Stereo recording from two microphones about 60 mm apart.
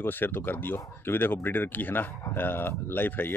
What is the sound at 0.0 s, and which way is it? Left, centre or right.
Speech, left.